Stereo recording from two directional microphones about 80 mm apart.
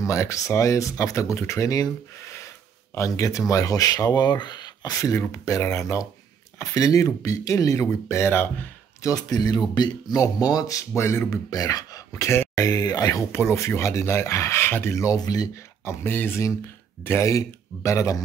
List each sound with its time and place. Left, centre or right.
0.0 s speech: left
5.3 s speech: left
9.0 s speech: left
11.0 s speech: left
11.5 s speech: left
12.5 s speech: left
13.3 s speech: left
15.0 s speech: left
15.8 s speech: left